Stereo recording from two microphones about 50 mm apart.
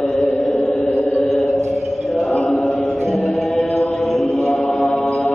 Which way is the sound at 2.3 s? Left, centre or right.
Centre.